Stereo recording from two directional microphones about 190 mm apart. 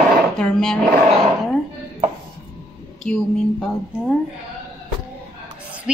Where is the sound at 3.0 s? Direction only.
5° left (ahead or behind).